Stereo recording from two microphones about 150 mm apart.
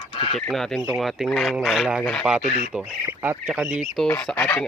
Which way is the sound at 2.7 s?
15° right (ahead or behind).